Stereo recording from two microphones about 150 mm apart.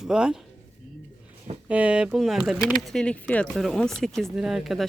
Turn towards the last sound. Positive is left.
turn(degrees=0)  # may be behind; listen again after turning